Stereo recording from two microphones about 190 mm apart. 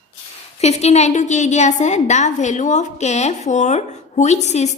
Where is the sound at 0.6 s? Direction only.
35° left (ahead or behind).